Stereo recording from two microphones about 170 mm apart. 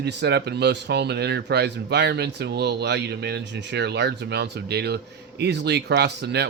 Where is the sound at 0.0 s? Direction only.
80° right.